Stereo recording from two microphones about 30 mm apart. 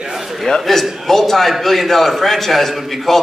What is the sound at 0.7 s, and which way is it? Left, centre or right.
A man's voice, centre.